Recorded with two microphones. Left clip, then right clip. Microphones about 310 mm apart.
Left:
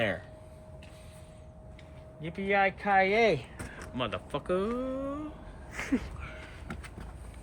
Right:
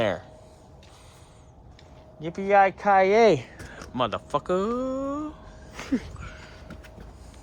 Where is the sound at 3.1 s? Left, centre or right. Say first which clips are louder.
Right 7 dB; right.